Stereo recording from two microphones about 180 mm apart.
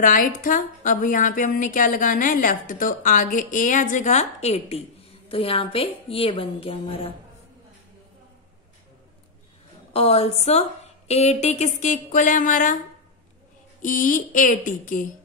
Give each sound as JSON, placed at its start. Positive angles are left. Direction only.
{"t": 0.0, "sound": "a woman's voice", "side_deg": 50}
{"t": 9.9, "sound": "a woman's voice", "side_deg": 35}
{"t": 13.8, "sound": "a woman's voice", "side_deg": 45}